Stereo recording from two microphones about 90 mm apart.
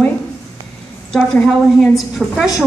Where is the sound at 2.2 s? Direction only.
5° right (ahead or behind).